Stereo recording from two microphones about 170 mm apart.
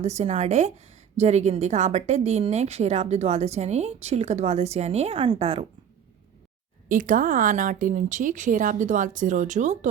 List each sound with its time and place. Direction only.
0.0 s a woman's voice: 40° right (ahead or behind)
6.8 s speech: 50° right (ahead or behind)